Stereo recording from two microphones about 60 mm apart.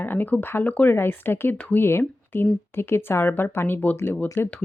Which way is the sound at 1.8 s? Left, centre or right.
Left.